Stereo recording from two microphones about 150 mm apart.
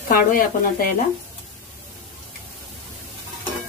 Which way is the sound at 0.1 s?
70° left (ahead or behind).